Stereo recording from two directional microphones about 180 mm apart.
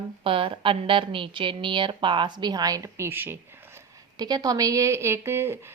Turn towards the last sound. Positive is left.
turn(degrees=-15)  # may be behind; listen again after turning